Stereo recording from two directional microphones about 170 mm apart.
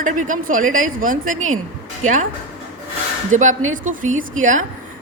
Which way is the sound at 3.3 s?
50° right (ahead or behind).